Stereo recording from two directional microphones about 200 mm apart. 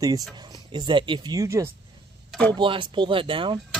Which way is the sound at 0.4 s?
20° right (ahead or behind).